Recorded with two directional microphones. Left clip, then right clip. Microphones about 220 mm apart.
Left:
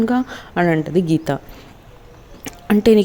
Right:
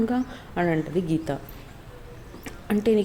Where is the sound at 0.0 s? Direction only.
40° left (ahead or behind).